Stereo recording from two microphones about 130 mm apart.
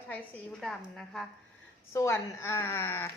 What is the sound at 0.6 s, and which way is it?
Speech, centre (ahead or behind).